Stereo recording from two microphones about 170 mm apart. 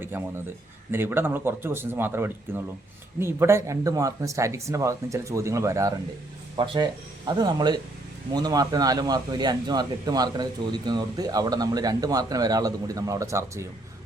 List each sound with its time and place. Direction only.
0.0 s a man's voice: 15° right (ahead or behind)